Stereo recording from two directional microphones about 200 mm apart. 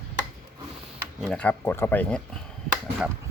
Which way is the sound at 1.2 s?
5° left (ahead or behind).